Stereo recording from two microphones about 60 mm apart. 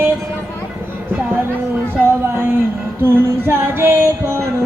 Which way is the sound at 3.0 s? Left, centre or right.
Right.